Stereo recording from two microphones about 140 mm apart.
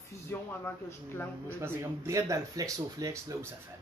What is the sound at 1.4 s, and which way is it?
Speech, 20° right (ahead or behind).